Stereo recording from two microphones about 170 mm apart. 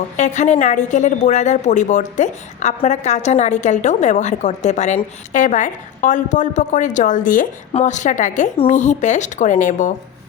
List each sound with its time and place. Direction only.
0.2 s a woman's voice: 45° left (ahead or behind)